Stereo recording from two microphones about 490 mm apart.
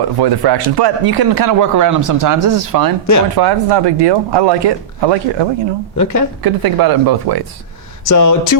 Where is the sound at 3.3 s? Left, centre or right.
Right.